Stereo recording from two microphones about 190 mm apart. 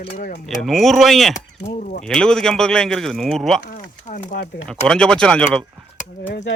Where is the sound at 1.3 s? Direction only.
40° left (ahead or behind).